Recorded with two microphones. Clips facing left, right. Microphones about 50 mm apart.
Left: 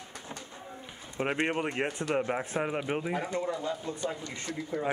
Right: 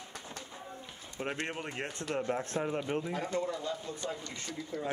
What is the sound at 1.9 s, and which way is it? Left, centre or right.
Speech, centre.